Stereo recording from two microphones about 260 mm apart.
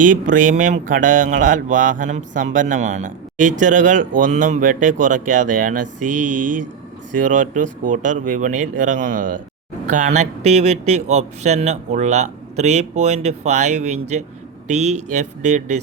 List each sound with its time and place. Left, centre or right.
0.0 s speech: right